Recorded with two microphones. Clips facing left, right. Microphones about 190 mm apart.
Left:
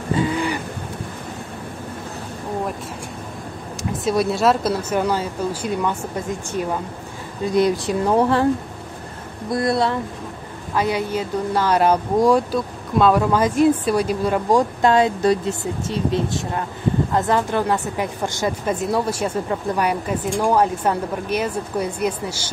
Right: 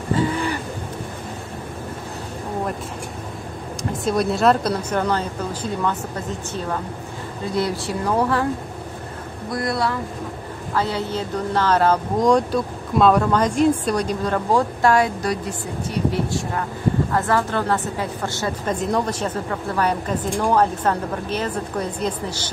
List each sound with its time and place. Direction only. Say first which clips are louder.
0.1 s a sound: even; 15° left (ahead or behind)
4.0 s a woman's voice: even; 5° left (ahead or behind); by 8.5 s 20° left (ahead or behind)
9.6 s speech: left 3 dB; 25° left (ahead or behind)
10.7 s a woman's voice: left 2 dB; 15° left (ahead or behind)